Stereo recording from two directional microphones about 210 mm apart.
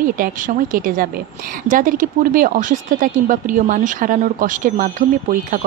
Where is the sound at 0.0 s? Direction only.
40° right (ahead or behind).